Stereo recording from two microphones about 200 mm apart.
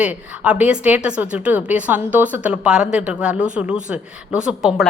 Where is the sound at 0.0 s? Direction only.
5° right (ahead or behind).